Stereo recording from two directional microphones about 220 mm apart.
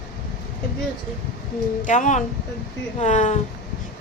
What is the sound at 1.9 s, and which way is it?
A woman's voice, 35° left (ahead or behind).